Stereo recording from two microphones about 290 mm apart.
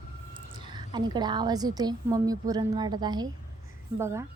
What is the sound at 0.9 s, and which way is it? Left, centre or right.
A woman's voice, centre.